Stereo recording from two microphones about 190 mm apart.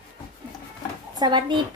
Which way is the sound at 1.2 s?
25° right (ahead or behind).